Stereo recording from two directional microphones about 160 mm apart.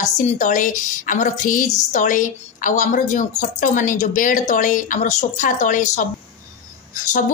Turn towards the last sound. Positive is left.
turn(degrees=55)  # may be behind; listen again after turning